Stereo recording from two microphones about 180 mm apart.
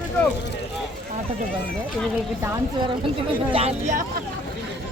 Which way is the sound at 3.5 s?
35° right (ahead or behind).